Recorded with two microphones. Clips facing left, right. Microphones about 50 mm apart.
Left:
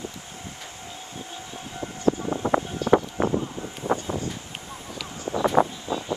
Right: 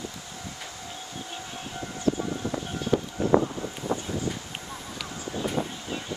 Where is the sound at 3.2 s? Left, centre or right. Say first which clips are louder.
Right 2 dB; left.